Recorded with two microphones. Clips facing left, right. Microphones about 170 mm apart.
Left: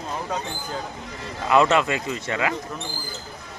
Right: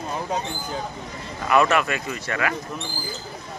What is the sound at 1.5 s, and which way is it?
Speech, 20° left (ahead or behind).